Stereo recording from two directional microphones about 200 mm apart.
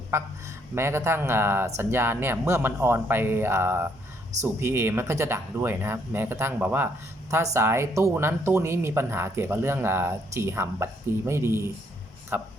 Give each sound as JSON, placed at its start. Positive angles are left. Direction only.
{"t": 0.1, "sound": "speech", "side_deg": -15}